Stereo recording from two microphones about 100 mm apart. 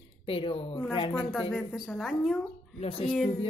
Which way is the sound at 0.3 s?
70° left (ahead or behind).